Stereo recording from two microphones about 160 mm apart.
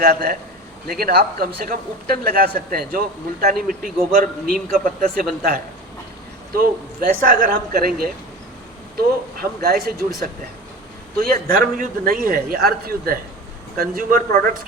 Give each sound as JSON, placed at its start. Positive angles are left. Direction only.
{"t": 0.0, "sound": "speech", "side_deg": -70}
{"t": 3.7, "sound": "a man's voice", "side_deg": -60}